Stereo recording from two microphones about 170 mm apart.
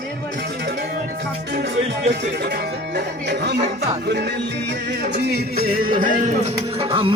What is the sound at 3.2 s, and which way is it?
Speech, 80° right.